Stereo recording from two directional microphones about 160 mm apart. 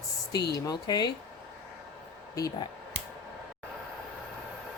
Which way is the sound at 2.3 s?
20° left (ahead or behind).